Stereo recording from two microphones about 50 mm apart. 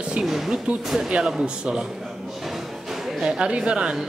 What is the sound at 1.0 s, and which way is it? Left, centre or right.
Speech, centre.